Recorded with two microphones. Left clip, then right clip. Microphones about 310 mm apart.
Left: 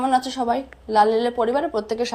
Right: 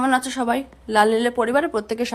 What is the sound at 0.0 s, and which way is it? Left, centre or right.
A woman's voice, centre.